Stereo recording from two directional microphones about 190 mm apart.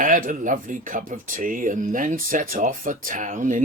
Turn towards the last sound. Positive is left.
turn(degrees=-45)  # may be behind; listen again after turning